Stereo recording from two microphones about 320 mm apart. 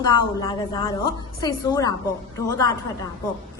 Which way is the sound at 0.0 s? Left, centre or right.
Centre.